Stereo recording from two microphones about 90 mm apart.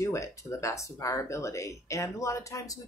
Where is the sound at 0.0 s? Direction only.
35° left (ahead or behind).